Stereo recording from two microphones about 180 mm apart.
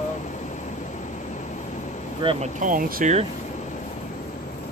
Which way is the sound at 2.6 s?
50° right (ahead or behind).